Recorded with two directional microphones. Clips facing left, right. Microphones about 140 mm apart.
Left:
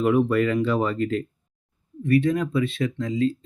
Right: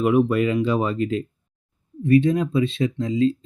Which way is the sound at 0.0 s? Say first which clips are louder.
Right 1 dB; 15° right (ahead or behind).